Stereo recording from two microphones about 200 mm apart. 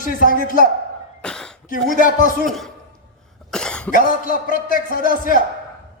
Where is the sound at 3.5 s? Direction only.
5° left (ahead or behind).